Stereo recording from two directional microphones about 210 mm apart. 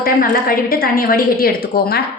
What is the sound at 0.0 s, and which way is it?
A woman's voice, 45° left (ahead or behind).